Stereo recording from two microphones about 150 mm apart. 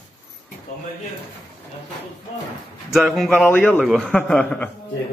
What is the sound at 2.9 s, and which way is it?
A man's voice, centre (ahead or behind).